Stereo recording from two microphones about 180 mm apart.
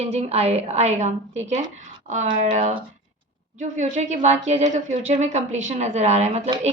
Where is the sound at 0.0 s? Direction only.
35° right (ahead or behind).